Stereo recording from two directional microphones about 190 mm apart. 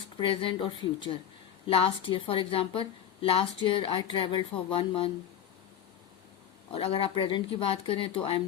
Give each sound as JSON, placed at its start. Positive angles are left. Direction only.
{"t": 0.2, "sound": "a woman's voice", "side_deg": 25}
{"t": 6.7, "sound": "a woman's voice", "side_deg": 30}